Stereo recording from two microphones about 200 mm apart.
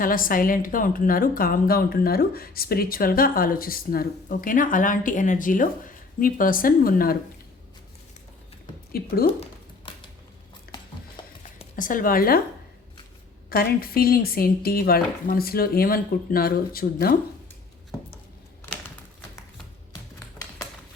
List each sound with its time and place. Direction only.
0.0 s a woman's voice: 45° left (ahead or behind)
8.9 s speech: 50° left (ahead or behind)
10.7 s a sound: 50° left (ahead or behind)
11.2 s music: 25° left (ahead or behind)
11.8 s a woman's voice: 45° left (ahead or behind)
13.5 s a woman's voice: 50° left (ahead or behind)